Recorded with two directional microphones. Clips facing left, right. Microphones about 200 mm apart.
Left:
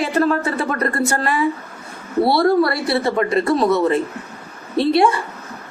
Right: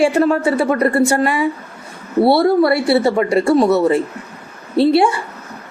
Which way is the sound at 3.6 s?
5° right (ahead or behind).